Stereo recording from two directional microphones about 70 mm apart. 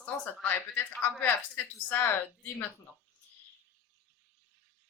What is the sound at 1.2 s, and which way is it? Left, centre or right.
Speech, left.